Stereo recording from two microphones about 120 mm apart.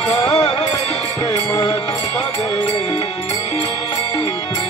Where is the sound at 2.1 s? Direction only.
60° left (ahead or behind).